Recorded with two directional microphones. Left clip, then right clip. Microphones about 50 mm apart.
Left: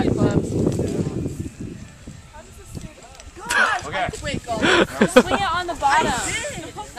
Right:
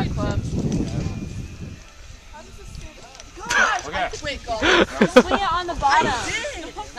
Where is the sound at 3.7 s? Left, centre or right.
Centre.